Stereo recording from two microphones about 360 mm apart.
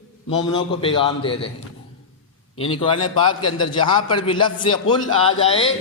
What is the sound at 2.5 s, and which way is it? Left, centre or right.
A man's voice, centre.